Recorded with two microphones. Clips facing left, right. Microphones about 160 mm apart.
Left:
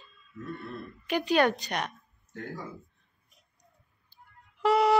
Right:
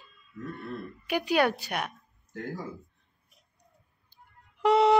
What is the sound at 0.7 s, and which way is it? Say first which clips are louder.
Speech: right 1 dB; 10° right (ahead or behind).